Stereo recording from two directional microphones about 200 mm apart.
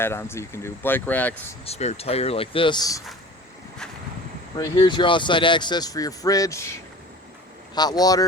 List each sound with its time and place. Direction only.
0.0 s speech: 10° left (ahead or behind)
1.6 s speech: 30° left (ahead or behind)
4.5 s speech: 20° left (ahead or behind)
7.8 s speech: 20° left (ahead or behind)